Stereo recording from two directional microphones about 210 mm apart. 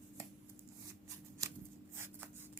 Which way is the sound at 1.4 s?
15° right (ahead or behind).